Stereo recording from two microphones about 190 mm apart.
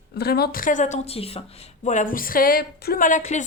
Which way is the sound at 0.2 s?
55° left (ahead or behind).